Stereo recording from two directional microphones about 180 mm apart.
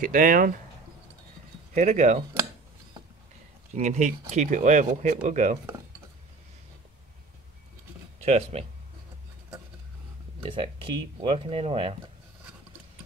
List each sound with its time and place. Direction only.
0.0 s speech: 50° right (ahead or behind)
1.7 s speech: 40° right (ahead or behind)
3.7 s speech: 40° right (ahead or behind)
8.2 s speech: 35° right (ahead or behind)
10.4 s speech: 30° right (ahead or behind)